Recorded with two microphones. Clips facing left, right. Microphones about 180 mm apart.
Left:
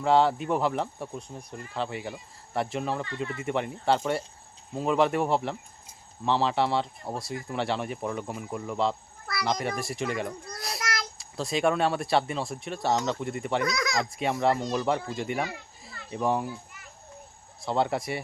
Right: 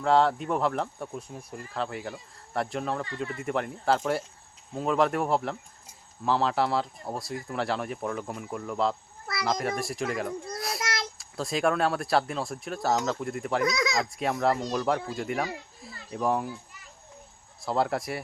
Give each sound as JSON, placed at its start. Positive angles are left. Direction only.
{"t": 0.0, "sound": "speech", "side_deg": 0}
{"t": 10.8, "sound": "a sound", "side_deg": -25}
{"t": 11.2, "sound": "speech", "side_deg": 0}
{"t": 13.7, "sound": "speech", "side_deg": -25}
{"t": 14.0, "sound": "speech", "side_deg": 0}
{"t": 17.6, "sound": "speech", "side_deg": 0}